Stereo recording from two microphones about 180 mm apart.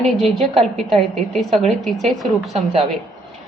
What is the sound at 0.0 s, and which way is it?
A woman's voice, centre (ahead or behind).